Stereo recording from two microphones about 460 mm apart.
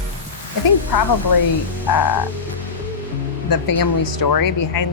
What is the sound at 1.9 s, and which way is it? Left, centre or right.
Speech, left.